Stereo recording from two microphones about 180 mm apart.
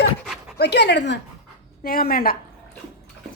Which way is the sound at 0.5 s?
65° left (ahead or behind).